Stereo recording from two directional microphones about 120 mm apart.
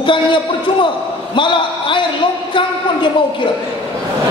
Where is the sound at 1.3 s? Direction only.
45° left (ahead or behind).